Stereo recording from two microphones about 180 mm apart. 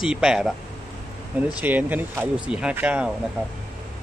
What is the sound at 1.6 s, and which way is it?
Speech, 10° right (ahead or behind).